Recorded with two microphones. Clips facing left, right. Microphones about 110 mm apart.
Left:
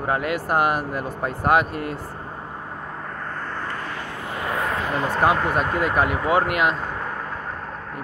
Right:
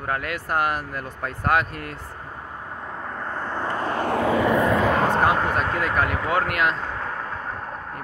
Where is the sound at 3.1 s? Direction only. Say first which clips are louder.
Right 4 dB; 10° right (ahead or behind); by 3.9 s 30° right (ahead or behind).